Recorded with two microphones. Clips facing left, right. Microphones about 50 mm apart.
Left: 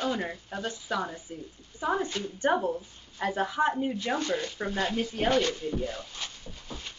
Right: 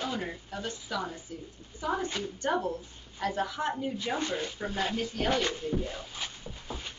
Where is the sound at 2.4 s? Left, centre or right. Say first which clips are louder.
Left 4 dB; centre.